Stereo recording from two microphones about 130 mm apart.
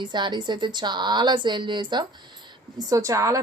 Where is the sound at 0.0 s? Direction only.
35° right (ahead or behind).